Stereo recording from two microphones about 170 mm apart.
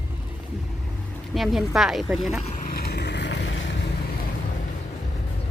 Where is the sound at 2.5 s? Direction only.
55° left (ahead or behind); by 3.6 s 90° left.